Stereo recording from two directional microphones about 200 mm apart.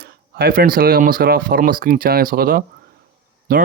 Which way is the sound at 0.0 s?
50° right (ahead or behind).